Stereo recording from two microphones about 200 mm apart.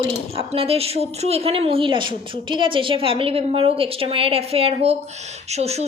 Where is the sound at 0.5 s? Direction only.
30° right (ahead or behind).